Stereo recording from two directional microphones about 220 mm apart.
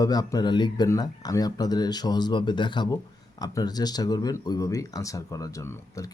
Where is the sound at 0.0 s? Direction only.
15° left (ahead or behind).